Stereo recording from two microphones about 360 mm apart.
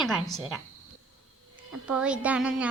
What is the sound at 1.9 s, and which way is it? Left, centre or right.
Speech, centre.